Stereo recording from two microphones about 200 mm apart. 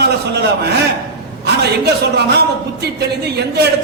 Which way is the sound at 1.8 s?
55° right (ahead or behind).